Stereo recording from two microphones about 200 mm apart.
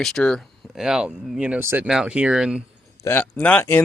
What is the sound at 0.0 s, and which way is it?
Speech, 5° left (ahead or behind).